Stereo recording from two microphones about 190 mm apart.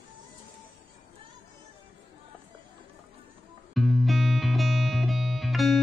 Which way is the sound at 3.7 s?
Centre (ahead or behind).